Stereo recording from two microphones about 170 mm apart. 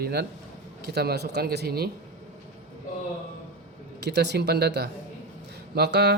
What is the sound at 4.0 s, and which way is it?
Speech, 80° right.